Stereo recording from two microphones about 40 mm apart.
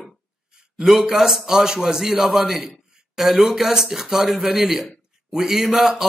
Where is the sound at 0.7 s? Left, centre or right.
Centre.